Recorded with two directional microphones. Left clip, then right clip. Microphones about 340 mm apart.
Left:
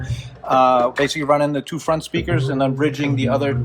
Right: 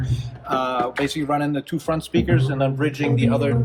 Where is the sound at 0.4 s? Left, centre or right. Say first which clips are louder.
Left 8 dB; left.